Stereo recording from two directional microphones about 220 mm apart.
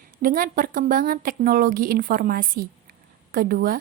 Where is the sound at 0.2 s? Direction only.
40° right (ahead or behind).